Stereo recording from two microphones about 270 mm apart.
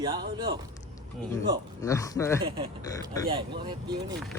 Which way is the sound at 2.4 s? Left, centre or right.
Centre.